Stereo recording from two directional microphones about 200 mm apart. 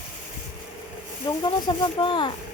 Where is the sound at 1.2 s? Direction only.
20° left (ahead or behind).